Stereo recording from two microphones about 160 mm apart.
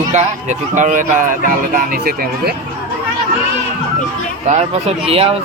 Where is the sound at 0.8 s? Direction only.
55° right (ahead or behind).